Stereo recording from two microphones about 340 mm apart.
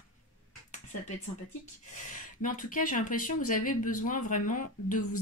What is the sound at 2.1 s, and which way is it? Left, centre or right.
Speech, left.